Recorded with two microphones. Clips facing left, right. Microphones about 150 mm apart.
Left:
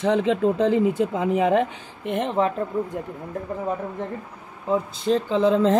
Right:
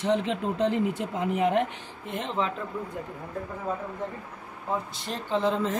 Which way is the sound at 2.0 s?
55° left (ahead or behind).